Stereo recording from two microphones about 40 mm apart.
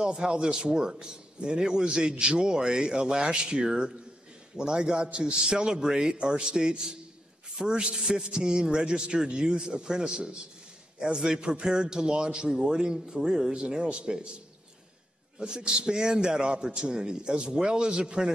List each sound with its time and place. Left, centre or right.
0.0 s a man's voice: right
15.3 s a man's voice: centre